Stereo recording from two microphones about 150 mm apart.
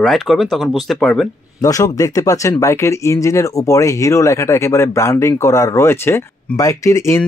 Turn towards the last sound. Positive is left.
turn(degrees=20)  # may be behind; listen again after turning